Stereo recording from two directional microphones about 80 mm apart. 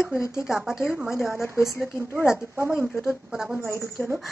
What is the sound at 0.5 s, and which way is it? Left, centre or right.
Speech, centre.